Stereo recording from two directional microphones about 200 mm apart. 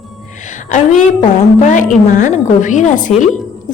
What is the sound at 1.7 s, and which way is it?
Speech, 40° left (ahead or behind).